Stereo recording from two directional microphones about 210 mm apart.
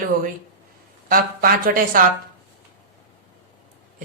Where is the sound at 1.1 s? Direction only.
45° right (ahead or behind).